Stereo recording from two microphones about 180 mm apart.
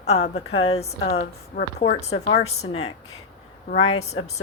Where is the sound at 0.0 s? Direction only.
35° left (ahead or behind).